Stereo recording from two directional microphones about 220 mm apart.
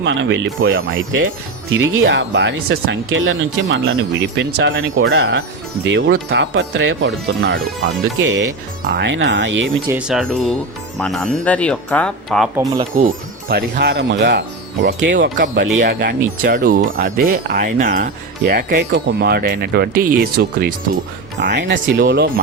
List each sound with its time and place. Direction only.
0.0 s speech: 55° right (ahead or behind)
9.9 s speech: centre (ahead or behind)
13.0 s speech: 45° right (ahead or behind)
15.4 s speech: 40° right (ahead or behind)